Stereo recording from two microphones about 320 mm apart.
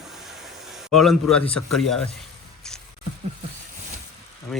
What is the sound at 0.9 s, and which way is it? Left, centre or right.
Speech, centre.